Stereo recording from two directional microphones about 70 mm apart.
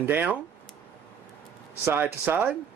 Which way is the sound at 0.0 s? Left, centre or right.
Right.